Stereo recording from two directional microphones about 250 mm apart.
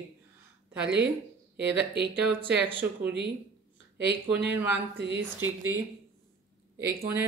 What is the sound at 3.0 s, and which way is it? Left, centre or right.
Speech, right.